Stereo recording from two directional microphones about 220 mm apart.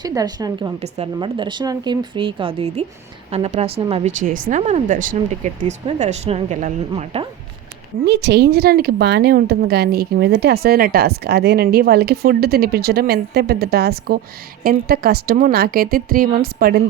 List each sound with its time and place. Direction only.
0.0 s a woman's voice: 15° right (ahead or behind)
8.0 s a woman's voice: 50° right (ahead or behind)